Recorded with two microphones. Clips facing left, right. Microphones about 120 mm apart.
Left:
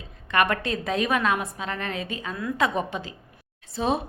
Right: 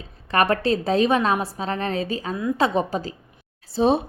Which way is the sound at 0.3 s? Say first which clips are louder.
Right 4 dB; 35° right (ahead or behind).